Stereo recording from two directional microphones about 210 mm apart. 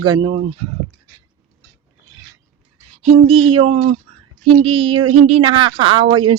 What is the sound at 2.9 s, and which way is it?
A woman's voice, 30° right (ahead or behind).